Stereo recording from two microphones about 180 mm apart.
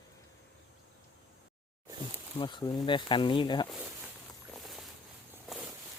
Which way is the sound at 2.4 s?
25° left (ahead or behind).